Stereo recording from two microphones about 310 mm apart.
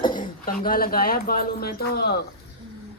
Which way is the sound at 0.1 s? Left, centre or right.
Left.